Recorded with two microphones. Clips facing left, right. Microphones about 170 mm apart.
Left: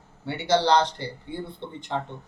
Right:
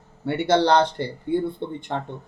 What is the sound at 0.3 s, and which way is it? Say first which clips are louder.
Speech: right 3 dB; 55° right (ahead or behind).